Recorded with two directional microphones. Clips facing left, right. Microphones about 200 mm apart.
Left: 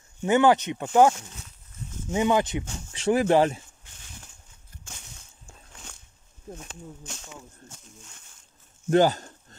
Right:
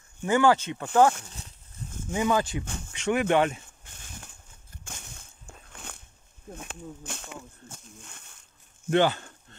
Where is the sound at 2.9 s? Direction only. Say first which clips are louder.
Left 3 dB; 35° left (ahead or behind).